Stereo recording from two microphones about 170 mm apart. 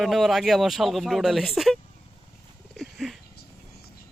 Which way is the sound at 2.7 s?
Centre (ahead or behind).